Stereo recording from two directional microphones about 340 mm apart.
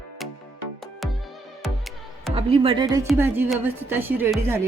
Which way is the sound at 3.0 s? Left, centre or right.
Centre.